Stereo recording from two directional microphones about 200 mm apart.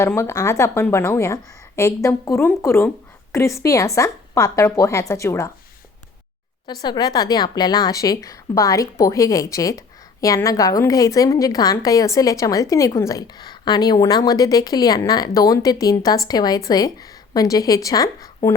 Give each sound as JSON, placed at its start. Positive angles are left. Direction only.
{"t": 0.0, "sound": "a woman's voice", "side_deg": 15}
{"t": 6.8, "sound": "a woman's voice", "side_deg": 20}